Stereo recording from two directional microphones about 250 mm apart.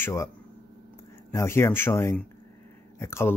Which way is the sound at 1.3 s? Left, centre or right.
Centre.